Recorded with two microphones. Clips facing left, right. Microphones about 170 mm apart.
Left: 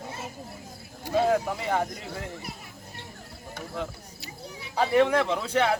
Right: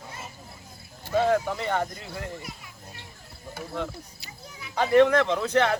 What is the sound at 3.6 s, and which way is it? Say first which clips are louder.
A man's voice: right 2 dB; centre (ahead or behind).